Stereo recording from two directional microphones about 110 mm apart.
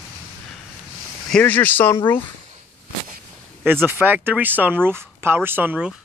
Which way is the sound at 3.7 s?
20° right (ahead or behind).